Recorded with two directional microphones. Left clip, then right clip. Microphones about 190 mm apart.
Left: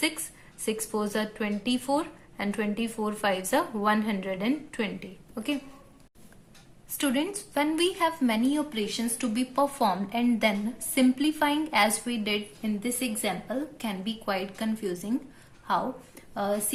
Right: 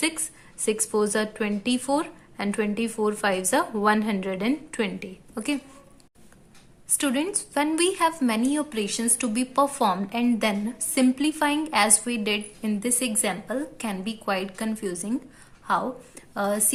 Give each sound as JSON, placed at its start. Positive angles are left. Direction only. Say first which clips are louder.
{"t": 0.6, "sound": "speech", "louder": "right 6 dB", "side_deg": -25}
{"t": 6.9, "sound": "speech", "louder": "right 3 dB", "side_deg": -15}
{"t": 16.3, "sound": "a woman's voice", "louder": "right 3 dB", "side_deg": -30}